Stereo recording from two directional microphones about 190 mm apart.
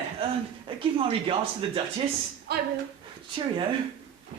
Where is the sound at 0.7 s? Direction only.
25° right (ahead or behind).